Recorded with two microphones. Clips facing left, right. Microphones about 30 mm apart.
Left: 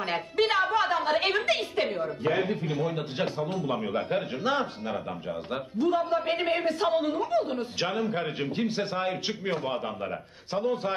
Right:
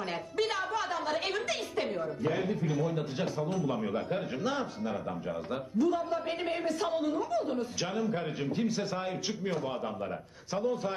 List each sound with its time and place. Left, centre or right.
0.0 s a man's voice: left